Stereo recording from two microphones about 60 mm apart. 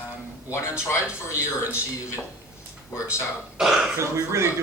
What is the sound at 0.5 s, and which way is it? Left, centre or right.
Speech, left.